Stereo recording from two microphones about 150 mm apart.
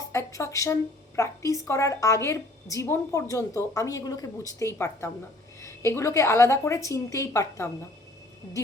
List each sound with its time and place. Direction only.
0.1 s a woman's voice: 20° left (ahead or behind)